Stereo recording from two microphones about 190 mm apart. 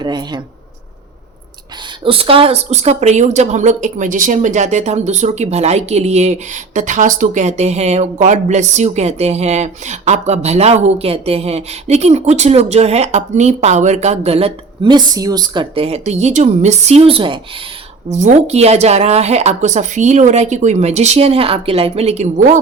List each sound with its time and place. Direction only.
0.0 s speech: 25° right (ahead or behind)
2.0 s speech: 30° right (ahead or behind)
18.1 s speech: 40° right (ahead or behind)